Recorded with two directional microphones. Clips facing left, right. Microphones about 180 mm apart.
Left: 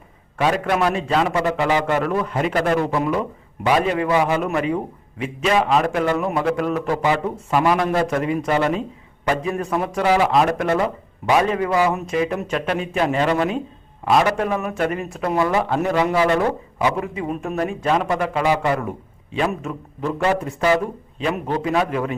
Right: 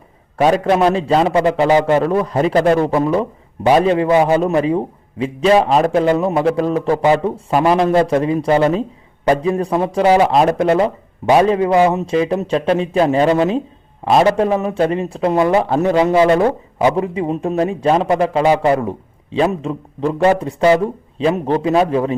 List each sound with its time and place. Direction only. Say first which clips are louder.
0.3 s a man's voice: right 6 dB; 35° right (ahead or behind)